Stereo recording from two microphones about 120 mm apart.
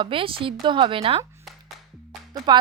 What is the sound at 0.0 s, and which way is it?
A woman's voice, 45° right (ahead or behind).